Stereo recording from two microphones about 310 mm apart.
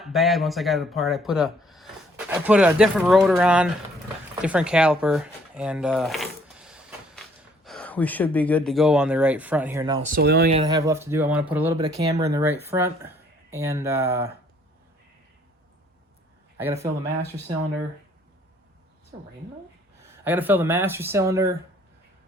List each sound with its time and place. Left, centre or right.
0.0 s speech: centre
10.2 s speech: right; by 14.3 s centre
20.2 s speech: centre